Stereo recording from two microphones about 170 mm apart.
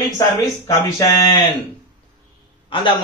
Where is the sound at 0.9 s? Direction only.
20° left (ahead or behind).